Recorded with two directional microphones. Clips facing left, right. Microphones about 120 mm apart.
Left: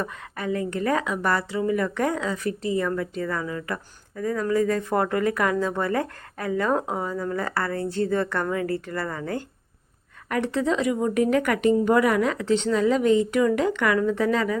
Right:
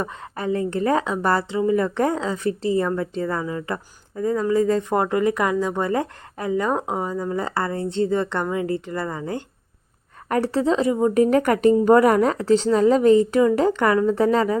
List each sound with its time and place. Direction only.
0.0 s a woman's voice: 30° right (ahead or behind)
10.2 s speech: 35° right (ahead or behind)